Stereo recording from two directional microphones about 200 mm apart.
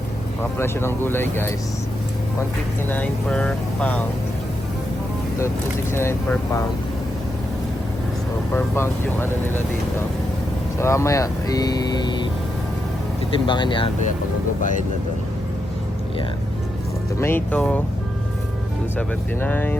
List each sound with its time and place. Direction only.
0.6 s speech: 10° left (ahead or behind)
2.9 s speech: 5° left (ahead or behind)
5.9 s speech: 10° left (ahead or behind)
8.5 s speech: 10° left (ahead or behind)
10.8 s speech: 15° left (ahead or behind)
13.3 s speech: 25° left (ahead or behind)
14.6 s speech: 40° left (ahead or behind)
17.2 s speech: 10° left (ahead or behind)
18.9 s speech: 10° left (ahead or behind)